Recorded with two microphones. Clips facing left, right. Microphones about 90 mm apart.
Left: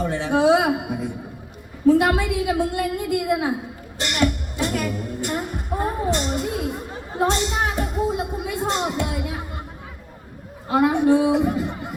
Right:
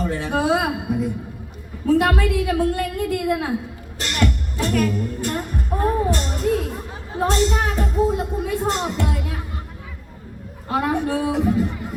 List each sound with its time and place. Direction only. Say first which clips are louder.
0.0 s a woman's voice: left 3 dB; 15° left (ahead or behind)
4.0 s music: left 1 dB; 15° left (ahead or behind)
10.7 s a woman's voice: left 4 dB; 15° left (ahead or behind)